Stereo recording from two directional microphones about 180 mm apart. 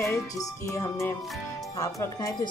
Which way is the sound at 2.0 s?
20° left (ahead or behind).